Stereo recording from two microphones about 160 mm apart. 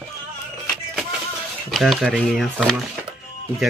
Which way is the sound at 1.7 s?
Centre (ahead or behind).